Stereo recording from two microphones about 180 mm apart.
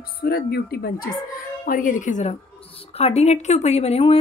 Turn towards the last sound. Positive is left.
turn(degrees=35)  # may be behind; listen again after turning